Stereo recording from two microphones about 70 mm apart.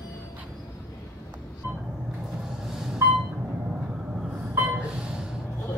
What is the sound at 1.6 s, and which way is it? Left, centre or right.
Vehicle, right.